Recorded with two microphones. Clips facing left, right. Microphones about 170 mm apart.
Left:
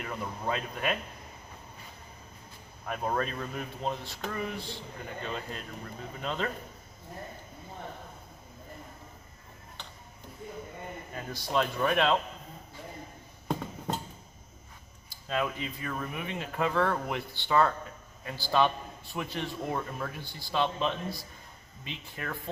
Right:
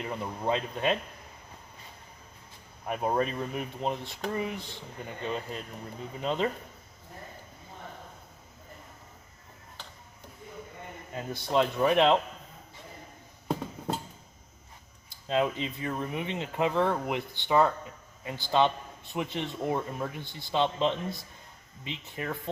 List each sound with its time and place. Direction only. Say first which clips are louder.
0.0 s a man's voice: right 3 dB; 25° right (ahead or behind)
2.8 s a man's voice: right 3 dB; 15° right (ahead or behind)
11.1 s a man's voice: right 3 dB; 25° right (ahead or behind)
13.5 s a sound: right 1 dB; 5° right (ahead or behind)
15.3 s a man's voice: right 4 dB; 25° right (ahead or behind)